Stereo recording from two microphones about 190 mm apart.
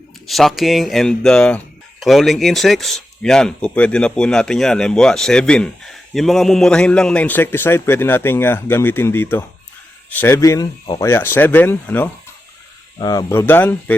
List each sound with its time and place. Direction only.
0.3 s speech: centre (ahead or behind)